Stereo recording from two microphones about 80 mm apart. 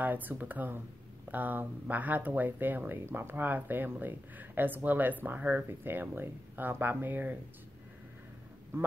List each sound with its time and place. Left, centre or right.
0.0 s speech: right